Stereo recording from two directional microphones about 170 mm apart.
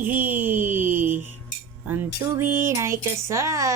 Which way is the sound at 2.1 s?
15° right (ahead or behind).